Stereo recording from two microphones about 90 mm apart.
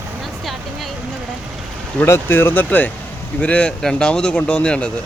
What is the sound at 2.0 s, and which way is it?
Speech, 25° left (ahead or behind).